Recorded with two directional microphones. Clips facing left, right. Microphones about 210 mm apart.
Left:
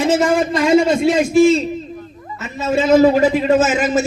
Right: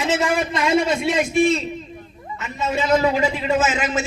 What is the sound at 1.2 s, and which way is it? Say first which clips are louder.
Speech: left 6 dB; 30° left (ahead or behind).